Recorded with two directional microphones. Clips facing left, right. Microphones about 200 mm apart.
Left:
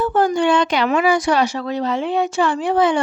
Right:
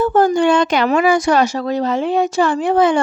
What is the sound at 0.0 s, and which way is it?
Speech, 45° right (ahead or behind).